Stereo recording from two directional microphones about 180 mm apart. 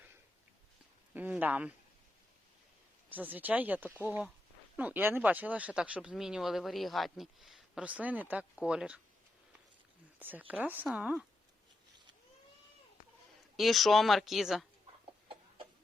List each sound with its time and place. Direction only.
1.1 s speech: 10° right (ahead or behind)
3.1 s speech: 10° right (ahead or behind)
10.2 s speech: 10° right (ahead or behind)
13.6 s speech: centre (ahead or behind)